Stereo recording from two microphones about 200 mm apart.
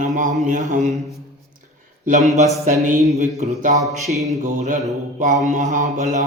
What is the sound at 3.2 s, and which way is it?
Mantra, 35° right (ahead or behind).